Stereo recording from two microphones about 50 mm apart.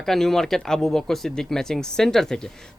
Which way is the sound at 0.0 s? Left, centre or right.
Centre.